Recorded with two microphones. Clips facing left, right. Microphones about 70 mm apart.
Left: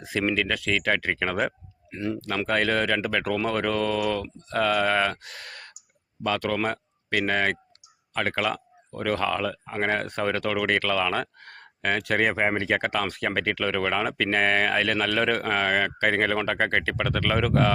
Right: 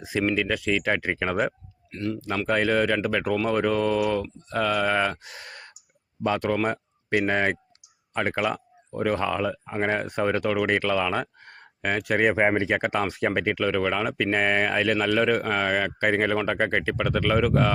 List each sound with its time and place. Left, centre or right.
0.0 s speech: centre
1.9 s speech: centre
2.5 s speech: centre